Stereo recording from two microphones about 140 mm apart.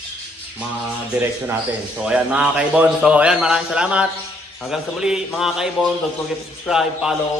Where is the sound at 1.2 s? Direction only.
10° right (ahead or behind).